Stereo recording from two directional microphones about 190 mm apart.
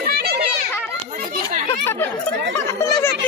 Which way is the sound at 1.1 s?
50° right (ahead or behind).